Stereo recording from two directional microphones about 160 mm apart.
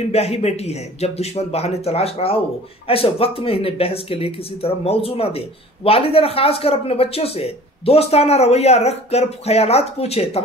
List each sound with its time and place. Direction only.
0.1 s a man's voice: 40° left (ahead or behind)